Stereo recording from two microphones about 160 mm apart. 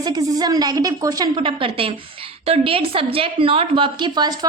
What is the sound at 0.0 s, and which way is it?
A woman's voice, 25° right (ahead or behind).